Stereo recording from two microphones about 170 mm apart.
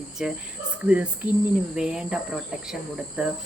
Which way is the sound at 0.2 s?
5° right (ahead or behind).